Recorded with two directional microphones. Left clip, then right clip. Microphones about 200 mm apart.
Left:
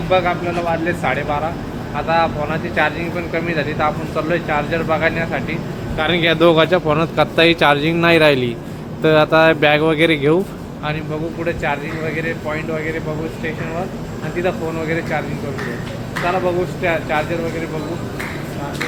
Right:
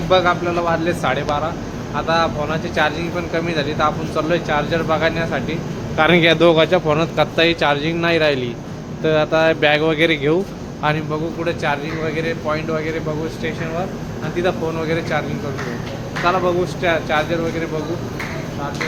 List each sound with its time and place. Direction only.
0.1 s speech: 20° right (ahead or behind)
6.0 s speech: 30° right (ahead or behind)
6.4 s speech: centre (ahead or behind)
11.1 s speech: 10° right (ahead or behind)
14.3 s speech: 10° right (ahead or behind)
16.8 s speech: 10° right (ahead or behind)